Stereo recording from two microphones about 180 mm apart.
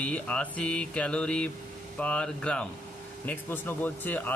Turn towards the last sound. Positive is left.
turn(degrees=10)  # may be behind; listen again after turning